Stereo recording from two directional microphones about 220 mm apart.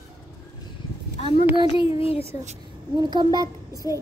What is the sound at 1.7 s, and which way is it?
Child singing, 25° left (ahead or behind).